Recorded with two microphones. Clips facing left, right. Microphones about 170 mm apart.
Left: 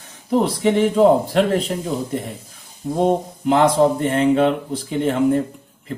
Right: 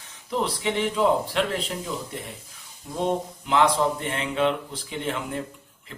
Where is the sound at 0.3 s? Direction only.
45° left (ahead or behind).